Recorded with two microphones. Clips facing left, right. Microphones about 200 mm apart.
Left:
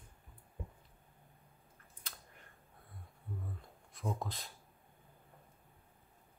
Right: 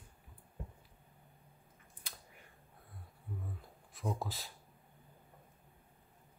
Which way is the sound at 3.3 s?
Centre (ahead or behind).